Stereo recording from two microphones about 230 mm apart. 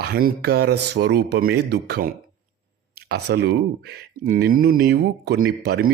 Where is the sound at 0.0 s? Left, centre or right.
Right.